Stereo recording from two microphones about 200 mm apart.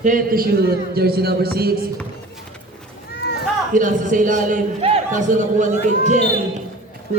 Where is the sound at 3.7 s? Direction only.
40° right (ahead or behind).